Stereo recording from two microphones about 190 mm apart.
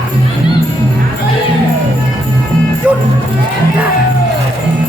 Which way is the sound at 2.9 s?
5° right (ahead or behind).